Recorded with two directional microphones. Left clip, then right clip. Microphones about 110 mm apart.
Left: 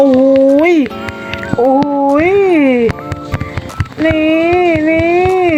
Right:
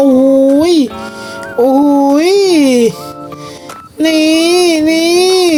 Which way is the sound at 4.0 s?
50° right (ahead or behind).